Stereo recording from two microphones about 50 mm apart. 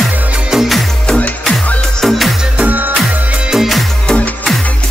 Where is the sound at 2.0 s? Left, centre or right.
Centre.